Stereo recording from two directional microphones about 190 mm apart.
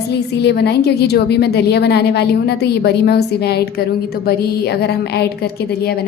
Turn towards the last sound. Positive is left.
turn(degrees=55)  # may be behind; listen again after turning